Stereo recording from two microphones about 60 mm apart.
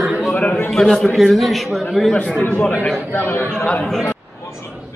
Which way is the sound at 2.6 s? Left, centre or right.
Left.